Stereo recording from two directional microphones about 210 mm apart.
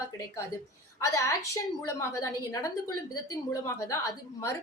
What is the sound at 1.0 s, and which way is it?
A woman's voice, 15° left (ahead or behind).